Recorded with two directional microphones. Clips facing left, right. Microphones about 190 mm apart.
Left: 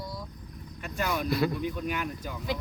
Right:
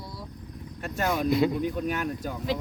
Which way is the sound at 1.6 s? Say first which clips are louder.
Right 3 dB; 45° right (ahead or behind).